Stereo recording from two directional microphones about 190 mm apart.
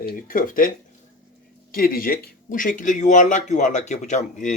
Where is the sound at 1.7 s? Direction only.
50° left (ahead or behind).